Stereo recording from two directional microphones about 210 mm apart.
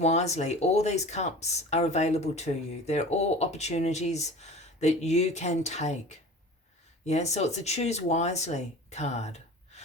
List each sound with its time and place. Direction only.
0.0 s speech: 30° left (ahead or behind)